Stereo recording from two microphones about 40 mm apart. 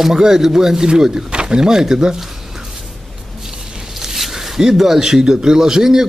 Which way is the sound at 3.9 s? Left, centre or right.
Centre.